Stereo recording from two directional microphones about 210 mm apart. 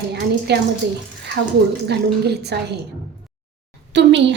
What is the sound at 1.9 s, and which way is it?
Speech, 50° right (ahead or behind).